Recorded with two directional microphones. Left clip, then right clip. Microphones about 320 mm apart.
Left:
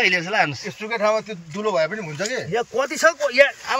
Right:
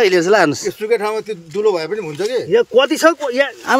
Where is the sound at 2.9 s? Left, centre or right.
Right.